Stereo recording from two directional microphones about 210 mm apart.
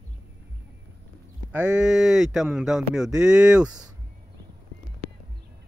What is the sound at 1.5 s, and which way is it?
Speech, 10° right (ahead or behind).